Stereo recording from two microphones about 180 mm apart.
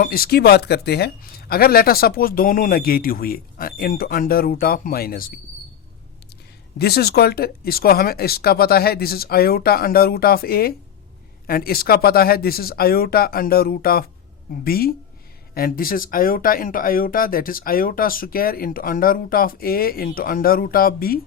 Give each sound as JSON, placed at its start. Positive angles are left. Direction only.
{"t": 0.0, "sound": "speech", "side_deg": 55}
{"t": 6.7, "sound": "speech", "side_deg": 60}